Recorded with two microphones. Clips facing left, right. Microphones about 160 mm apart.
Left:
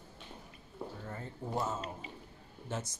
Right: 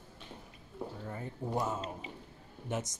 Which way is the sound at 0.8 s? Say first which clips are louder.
Right 2 dB; 10° right (ahead or behind).